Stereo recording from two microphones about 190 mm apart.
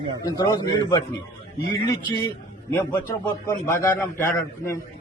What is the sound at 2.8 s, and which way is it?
A man's voice, 15° left (ahead or behind).